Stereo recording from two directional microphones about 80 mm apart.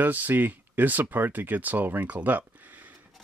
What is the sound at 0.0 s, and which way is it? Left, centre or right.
Speech, right.